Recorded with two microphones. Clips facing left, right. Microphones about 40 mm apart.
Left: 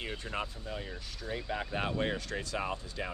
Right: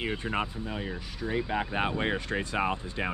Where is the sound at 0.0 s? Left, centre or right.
Right.